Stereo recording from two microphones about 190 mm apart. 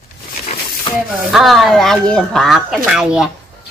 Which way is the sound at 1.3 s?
Centre (ahead or behind).